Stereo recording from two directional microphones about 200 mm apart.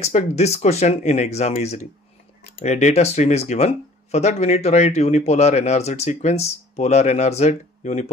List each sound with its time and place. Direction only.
0.0 s speech: 35° left (ahead or behind)